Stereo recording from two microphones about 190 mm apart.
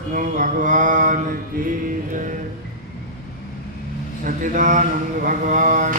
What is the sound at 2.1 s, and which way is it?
Music, 45° right (ahead or behind).